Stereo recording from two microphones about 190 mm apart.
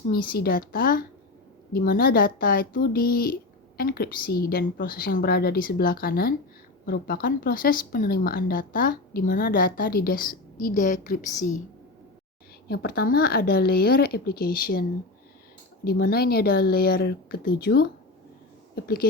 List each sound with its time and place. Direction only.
0.1 s speech: 50° left (ahead or behind)
12.6 s speech: 55° left (ahead or behind)